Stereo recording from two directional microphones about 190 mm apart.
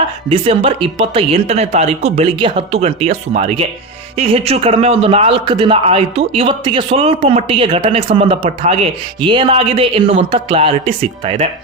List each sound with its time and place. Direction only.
0.3 s a man's voice: 30° right (ahead or behind)